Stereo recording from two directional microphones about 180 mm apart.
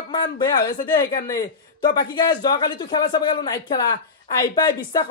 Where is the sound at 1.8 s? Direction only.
25° left (ahead or behind).